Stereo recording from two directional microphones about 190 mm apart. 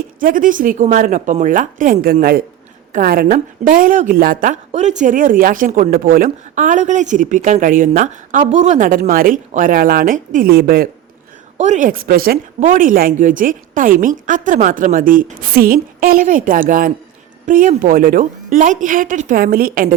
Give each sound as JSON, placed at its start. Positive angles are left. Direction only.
{"t": 0.2, "sound": "a woman's voice", "side_deg": -45}
{"t": 11.5, "sound": "a woman's voice", "side_deg": -40}